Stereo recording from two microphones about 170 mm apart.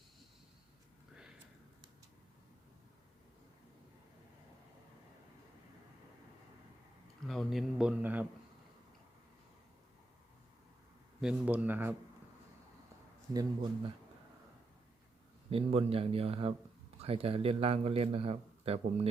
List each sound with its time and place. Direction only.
7.3 s a man's voice: centre (ahead or behind)
11.2 s speech: 5° right (ahead or behind)
13.3 s speech: 30° right (ahead or behind)
15.4 s a man's voice: 35° right (ahead or behind)